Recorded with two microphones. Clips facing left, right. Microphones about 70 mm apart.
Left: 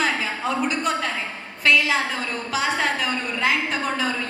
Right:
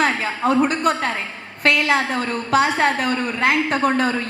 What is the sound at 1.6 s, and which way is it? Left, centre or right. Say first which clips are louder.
A woman's voice: right 2 dB; right.